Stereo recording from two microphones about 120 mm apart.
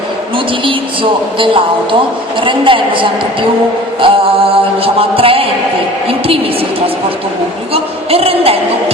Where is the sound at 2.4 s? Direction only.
45° right (ahead or behind).